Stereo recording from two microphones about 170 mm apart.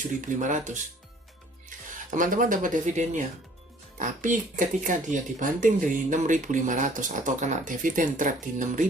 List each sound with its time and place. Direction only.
0.3 s speech: 50° right (ahead or behind)
2.0 s speech: 50° right (ahead or behind)